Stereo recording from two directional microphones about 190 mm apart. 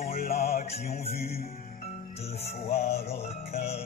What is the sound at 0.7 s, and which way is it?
Music, 35° left (ahead or behind).